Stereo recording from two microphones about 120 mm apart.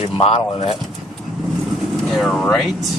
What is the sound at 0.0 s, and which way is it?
Speech, 55° left (ahead or behind).